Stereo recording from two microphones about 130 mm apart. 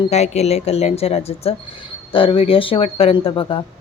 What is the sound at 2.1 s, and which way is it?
Speech, 40° left (ahead or behind).